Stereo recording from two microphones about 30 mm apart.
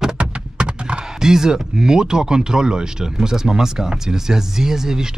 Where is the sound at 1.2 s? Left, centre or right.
Centre.